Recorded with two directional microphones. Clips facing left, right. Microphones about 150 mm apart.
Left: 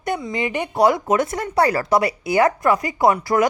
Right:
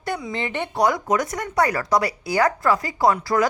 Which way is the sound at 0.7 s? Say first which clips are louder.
Left 4 dB; 25° left (ahead or behind).